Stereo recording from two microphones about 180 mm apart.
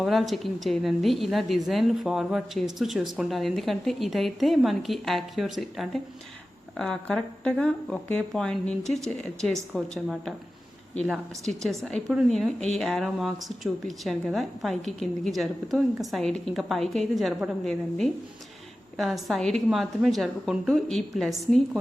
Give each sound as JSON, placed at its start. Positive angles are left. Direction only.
{"t": 0.0, "sound": "a woman's voice", "side_deg": 0}